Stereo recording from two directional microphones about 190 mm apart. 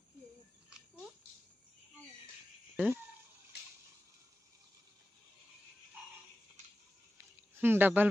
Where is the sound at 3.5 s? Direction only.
60° left (ahead or behind).